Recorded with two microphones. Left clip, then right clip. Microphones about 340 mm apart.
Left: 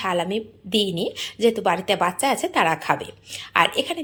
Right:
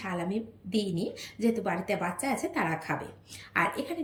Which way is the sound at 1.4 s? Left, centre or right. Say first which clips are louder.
Left 10 dB; left.